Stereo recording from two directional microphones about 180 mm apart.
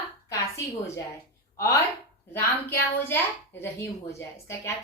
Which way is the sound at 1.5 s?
15° left (ahead or behind).